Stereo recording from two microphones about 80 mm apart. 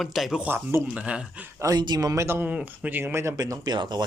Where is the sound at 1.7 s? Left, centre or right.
Right.